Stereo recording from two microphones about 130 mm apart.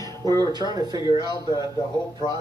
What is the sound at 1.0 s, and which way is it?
Speech, 35° left (ahead or behind).